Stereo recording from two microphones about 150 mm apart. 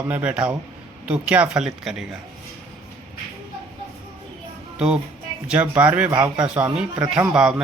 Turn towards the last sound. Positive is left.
turn(degrees=-5)  # may be behind; listen again after turning